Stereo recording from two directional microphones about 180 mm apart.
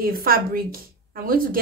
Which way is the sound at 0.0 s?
55° right (ahead or behind).